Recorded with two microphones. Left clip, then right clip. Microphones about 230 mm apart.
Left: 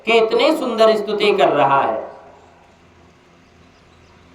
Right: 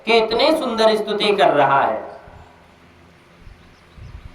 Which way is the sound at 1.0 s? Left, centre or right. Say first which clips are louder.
Left 2 dB; right.